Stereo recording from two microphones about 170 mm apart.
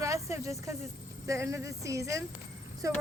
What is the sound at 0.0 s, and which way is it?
Snake, 20° right (ahead or behind).